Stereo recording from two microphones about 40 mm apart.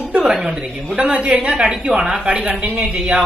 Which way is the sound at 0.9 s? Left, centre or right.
Right.